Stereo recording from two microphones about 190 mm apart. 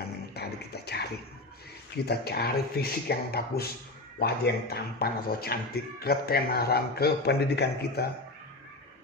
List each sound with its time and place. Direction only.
0.3 s music: 60° left (ahead or behind)
2.0 s speech: 55° left (ahead or behind)